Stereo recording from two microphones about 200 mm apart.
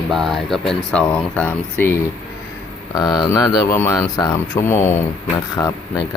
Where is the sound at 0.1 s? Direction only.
Centre (ahead or behind).